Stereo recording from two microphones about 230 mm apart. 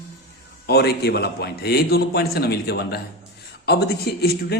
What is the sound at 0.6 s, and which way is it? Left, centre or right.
A man's voice, left.